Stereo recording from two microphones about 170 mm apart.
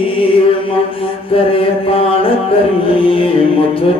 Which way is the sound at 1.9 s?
35° left (ahead or behind).